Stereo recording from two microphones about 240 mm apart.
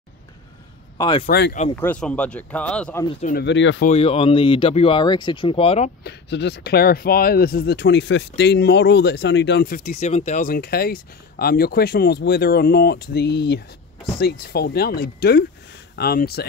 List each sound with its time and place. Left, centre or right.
0.9 s speech: centre
1.2 s speech: left
1.8 s speech: centre
3.1 s speech: left
3.3 s speech: left
3.9 s speech: left
6.0 s speech: left